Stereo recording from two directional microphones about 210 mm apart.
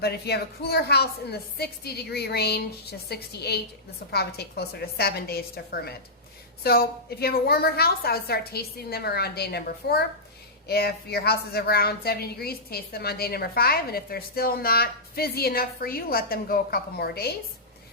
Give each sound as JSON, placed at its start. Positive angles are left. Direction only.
{"t": 0.0, "sound": "a woman's voice", "side_deg": 50}